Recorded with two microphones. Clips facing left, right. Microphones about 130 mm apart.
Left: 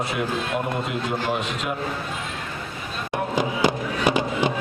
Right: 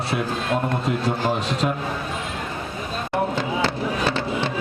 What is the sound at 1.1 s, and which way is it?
Speech, 35° right (ahead or behind).